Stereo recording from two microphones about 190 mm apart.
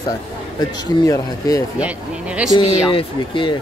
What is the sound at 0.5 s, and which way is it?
Speech, 20° left (ahead or behind).